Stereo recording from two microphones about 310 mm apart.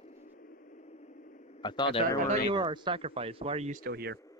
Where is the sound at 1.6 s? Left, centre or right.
Centre.